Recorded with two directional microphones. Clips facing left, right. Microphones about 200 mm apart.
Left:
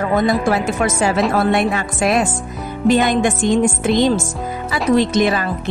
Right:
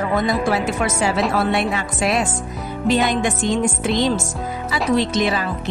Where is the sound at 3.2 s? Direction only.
50° left (ahead or behind).